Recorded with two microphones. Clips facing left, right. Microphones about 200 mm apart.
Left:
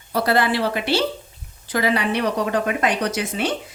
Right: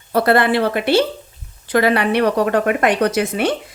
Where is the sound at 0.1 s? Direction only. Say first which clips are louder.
Right 5 dB; 55° right (ahead or behind).